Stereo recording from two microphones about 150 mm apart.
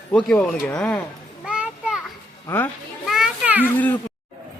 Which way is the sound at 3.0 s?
5° right (ahead or behind).